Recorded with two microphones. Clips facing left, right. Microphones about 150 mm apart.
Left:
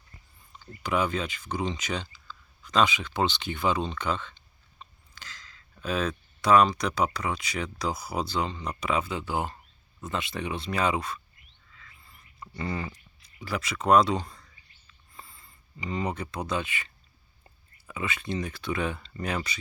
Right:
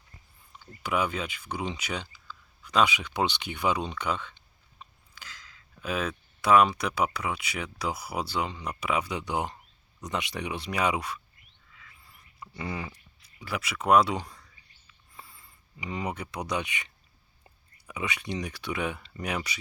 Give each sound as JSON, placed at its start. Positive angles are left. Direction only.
{"t": 0.8, "sound": "speech", "side_deg": -10}
{"t": 11.7, "sound": "a sound", "side_deg": -10}
{"t": 13.4, "sound": "speech", "side_deg": -10}